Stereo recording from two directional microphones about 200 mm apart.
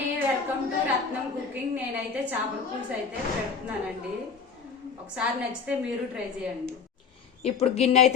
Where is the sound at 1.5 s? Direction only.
10° right (ahead or behind).